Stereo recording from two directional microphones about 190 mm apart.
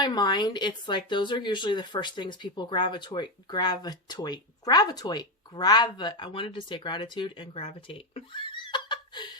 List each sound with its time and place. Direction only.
0.0 s speech: 20° left (ahead or behind)